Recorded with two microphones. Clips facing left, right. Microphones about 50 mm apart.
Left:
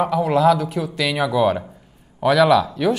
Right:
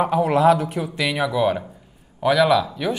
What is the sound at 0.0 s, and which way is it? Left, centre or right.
Speech, right.